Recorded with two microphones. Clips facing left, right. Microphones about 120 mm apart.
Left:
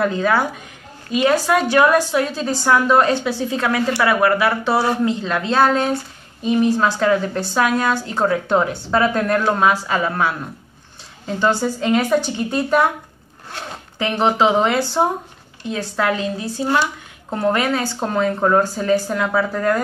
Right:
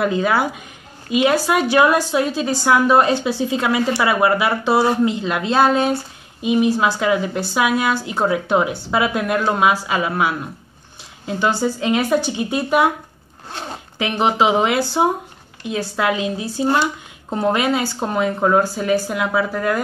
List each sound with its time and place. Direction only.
0.0 s speech: 15° right (ahead or behind)
13.5 s speech: 25° right (ahead or behind)